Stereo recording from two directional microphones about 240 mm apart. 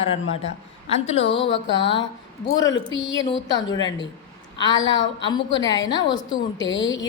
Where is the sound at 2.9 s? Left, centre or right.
Left.